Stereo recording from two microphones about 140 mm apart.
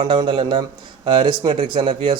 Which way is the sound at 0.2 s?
35° right (ahead or behind).